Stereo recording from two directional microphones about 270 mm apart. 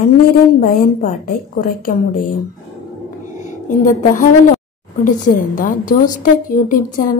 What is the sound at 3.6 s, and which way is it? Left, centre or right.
A woman's voice, left.